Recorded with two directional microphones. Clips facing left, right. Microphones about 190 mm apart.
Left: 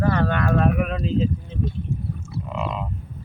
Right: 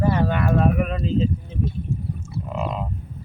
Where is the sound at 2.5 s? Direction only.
40° right (ahead or behind).